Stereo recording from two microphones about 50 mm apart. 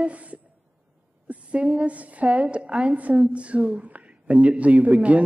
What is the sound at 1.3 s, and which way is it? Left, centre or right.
A man's voice, right.